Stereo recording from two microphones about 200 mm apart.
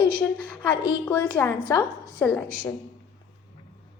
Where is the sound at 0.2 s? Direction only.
5° left (ahead or behind).